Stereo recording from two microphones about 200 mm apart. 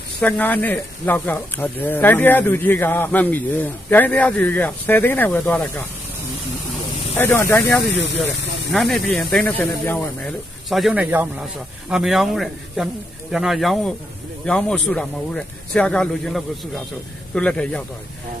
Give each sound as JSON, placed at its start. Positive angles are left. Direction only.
{"t": 0.2, "sound": "speech", "side_deg": 10}
{"t": 7.2, "sound": "speech", "side_deg": 10}
{"t": 7.9, "sound": "speech", "side_deg": 60}
{"t": 8.7, "sound": "speech", "side_deg": 0}